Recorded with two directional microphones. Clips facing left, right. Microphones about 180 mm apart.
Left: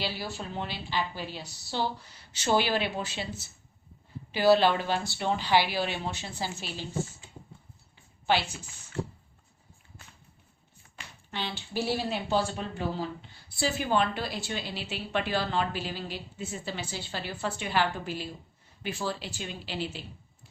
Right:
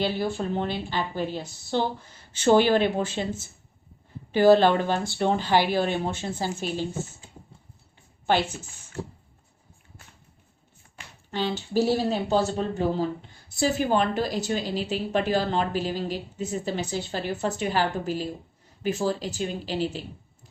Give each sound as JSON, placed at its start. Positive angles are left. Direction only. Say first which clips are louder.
{"t": 0.0, "sound": "speech", "louder": "right 9 dB", "side_deg": -50}
{"t": 10.9, "sound": "a woman's voice", "louder": "right 7 dB", "side_deg": -45}